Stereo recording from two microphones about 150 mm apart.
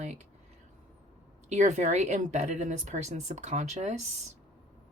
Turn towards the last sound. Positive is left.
turn(degrees=-50)  # may be behind; listen again after turning